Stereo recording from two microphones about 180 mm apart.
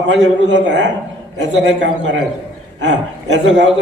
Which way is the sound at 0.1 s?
75° right (ahead or behind).